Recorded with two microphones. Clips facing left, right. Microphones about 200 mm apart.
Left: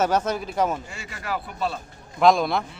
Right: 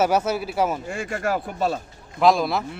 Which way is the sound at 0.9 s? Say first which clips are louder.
Right 7 dB; 50° right (ahead or behind).